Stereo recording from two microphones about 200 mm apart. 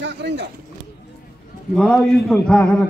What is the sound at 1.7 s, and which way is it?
A man's voice, 5° left (ahead or behind).